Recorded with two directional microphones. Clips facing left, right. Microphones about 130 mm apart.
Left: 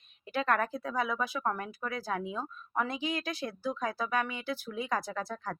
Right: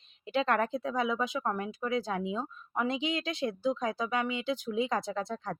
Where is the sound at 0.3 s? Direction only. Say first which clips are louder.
Right 2 dB; 25° right (ahead or behind).